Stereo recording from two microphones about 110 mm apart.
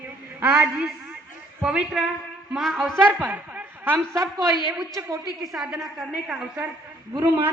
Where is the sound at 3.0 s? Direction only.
15° right (ahead or behind).